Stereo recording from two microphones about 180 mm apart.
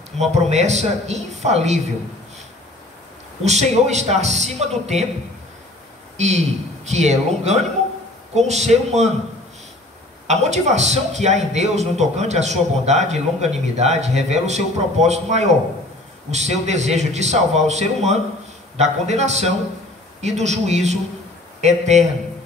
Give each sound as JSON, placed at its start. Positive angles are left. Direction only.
{"t": 0.2, "sound": "a man's voice", "side_deg": -40}
{"t": 3.4, "sound": "a man's voice", "side_deg": -40}
{"t": 6.1, "sound": "a man's voice", "side_deg": -40}
{"t": 10.2, "sound": "a man's voice", "side_deg": -40}